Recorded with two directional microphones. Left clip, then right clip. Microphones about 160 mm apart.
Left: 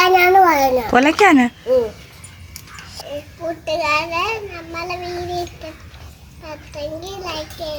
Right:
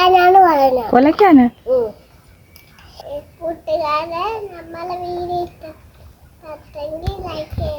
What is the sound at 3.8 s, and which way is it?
A child's voice, 15° left (ahead or behind).